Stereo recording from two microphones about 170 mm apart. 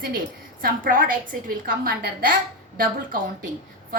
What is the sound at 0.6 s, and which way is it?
A woman's voice, 55° right (ahead or behind).